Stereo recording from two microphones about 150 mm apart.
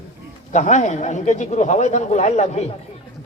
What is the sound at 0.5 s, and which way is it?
Speech, 55° left (ahead or behind).